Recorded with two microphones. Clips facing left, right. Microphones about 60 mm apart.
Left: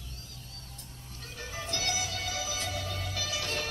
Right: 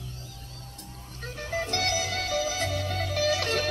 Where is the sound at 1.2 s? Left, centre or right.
Right.